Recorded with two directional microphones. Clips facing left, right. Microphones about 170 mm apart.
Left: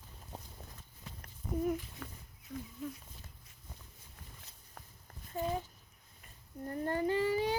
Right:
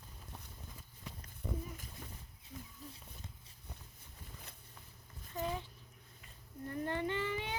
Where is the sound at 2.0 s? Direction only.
90° left.